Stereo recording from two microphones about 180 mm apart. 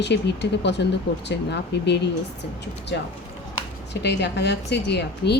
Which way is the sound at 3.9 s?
70° left (ahead or behind).